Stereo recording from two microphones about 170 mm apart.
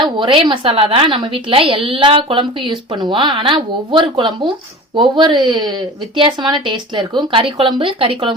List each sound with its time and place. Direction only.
0.2 s a woman's voice: 30° right (ahead or behind)